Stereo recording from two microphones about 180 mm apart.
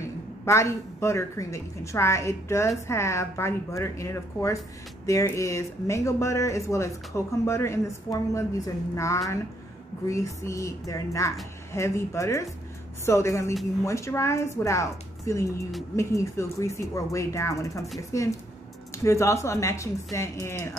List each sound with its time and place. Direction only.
0.0 s a woman's voice: 15° left (ahead or behind)